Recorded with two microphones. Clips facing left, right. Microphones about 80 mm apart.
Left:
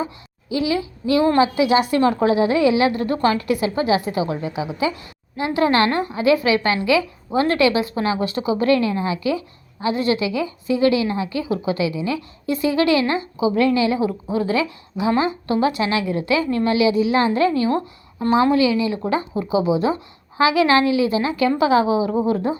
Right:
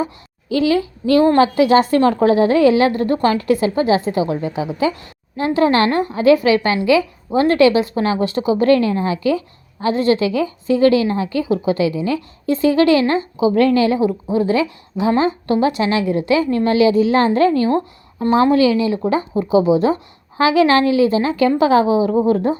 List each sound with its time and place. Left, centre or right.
0.4 s a woman's voice: right
13.5 s a woman's voice: right